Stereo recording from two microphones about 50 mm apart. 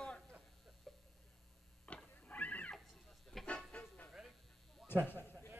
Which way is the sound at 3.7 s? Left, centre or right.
Left.